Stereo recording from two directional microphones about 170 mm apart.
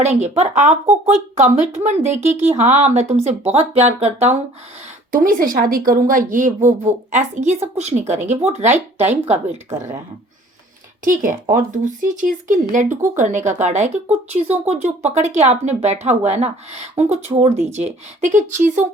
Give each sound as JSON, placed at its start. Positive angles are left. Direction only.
{"t": 0.0, "sound": "speech", "side_deg": -40}
{"t": 5.1, "sound": "speech", "side_deg": -55}
{"t": 9.6, "sound": "speech", "side_deg": -15}
{"t": 11.0, "sound": "speech", "side_deg": -55}